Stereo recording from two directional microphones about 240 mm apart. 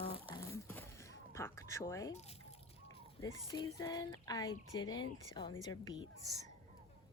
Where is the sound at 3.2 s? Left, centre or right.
Centre.